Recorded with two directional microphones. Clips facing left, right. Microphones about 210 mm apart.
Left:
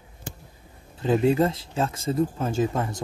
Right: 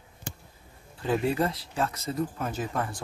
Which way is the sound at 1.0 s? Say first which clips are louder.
Left 6 dB; 25° left (ahead or behind).